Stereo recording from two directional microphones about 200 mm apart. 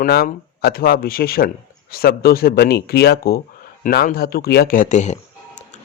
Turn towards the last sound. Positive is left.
turn(degrees=35)  # may be behind; listen again after turning